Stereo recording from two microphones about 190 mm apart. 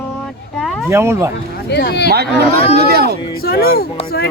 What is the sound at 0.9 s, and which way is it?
Speech, 15° right (ahead or behind).